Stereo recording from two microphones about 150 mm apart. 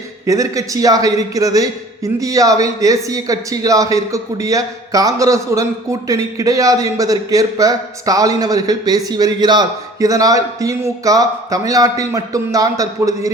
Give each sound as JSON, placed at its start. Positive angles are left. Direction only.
{"t": 0.3, "sound": "a man's voice", "side_deg": -20}